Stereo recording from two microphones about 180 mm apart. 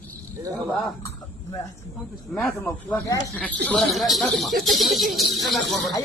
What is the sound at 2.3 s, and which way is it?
Speech, 10° left (ahead or behind).